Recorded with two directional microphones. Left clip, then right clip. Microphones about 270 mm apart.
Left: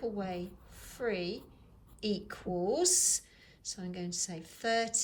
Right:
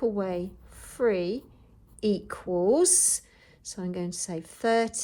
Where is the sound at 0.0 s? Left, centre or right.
Centre.